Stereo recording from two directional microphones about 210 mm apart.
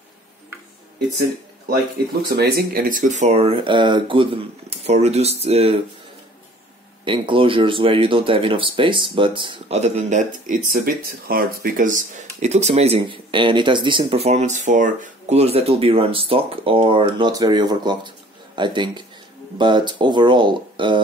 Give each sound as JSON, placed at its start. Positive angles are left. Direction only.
{"t": 2.2, "sound": "speech", "side_deg": -50}
{"t": 7.1, "sound": "speech", "side_deg": -25}